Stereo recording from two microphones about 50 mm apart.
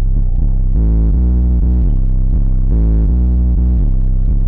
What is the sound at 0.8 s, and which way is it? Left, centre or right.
Music, right.